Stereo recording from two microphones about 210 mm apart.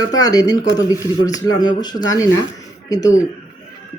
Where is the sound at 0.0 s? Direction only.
15° left (ahead or behind).